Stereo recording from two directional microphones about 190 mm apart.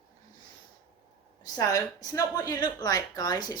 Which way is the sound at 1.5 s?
20° left (ahead or behind).